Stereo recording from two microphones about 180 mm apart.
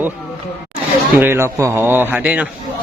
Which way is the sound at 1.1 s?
10° right (ahead or behind).